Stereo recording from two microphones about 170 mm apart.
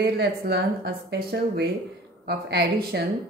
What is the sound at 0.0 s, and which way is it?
A woman's voice, 70° right (ahead or behind).